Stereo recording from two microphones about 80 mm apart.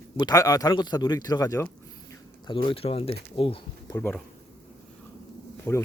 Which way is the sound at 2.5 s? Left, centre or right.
Left.